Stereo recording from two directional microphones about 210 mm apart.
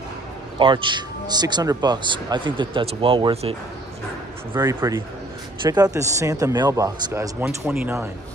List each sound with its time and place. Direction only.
0.6 s speech: 25° right (ahead or behind)
4.6 s a man's voice: 15° right (ahead or behind)